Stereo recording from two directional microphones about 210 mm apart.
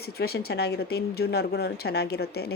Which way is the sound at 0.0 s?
50° left (ahead or behind).